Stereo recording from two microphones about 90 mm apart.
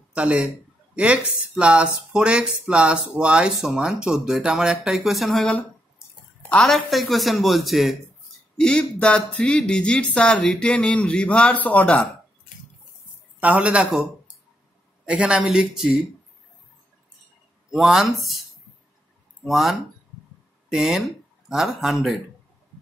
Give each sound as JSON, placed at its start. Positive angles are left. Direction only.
{"t": 0.1, "sound": "a man's voice", "side_deg": -15}
{"t": 8.5, "sound": "speech", "side_deg": 10}
{"t": 13.4, "sound": "speech", "side_deg": -15}
{"t": 17.6, "sound": "speech", "side_deg": -5}
{"t": 19.4, "sound": "speech", "side_deg": 0}